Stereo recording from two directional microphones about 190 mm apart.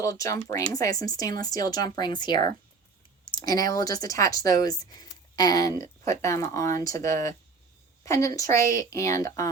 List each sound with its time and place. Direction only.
0.0 s a woman's voice: 15° left (ahead or behind)